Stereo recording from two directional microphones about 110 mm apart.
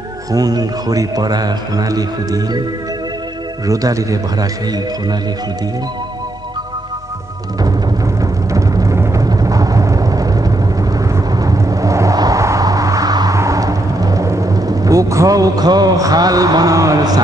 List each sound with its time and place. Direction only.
0.3 s a man's voice: 35° right (ahead or behind)
3.6 s a man's voice: 30° right (ahead or behind)
8.2 s music: 30° right (ahead or behind)
11.0 s a sound: 30° right (ahead or behind)